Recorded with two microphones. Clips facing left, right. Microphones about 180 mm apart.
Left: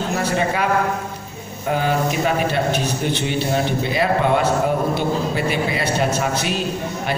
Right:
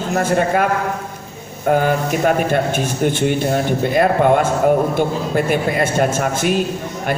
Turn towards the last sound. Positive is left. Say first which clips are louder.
# right 2 dB
turn(degrees=-50)  # may be behind; listen again after turning